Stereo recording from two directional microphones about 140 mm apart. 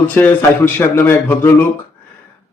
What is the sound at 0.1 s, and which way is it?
A man's voice, 15° left (ahead or behind).